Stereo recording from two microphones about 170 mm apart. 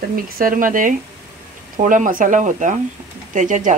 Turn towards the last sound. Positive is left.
turn(degrees=-50)  # may be behind; listen again after turning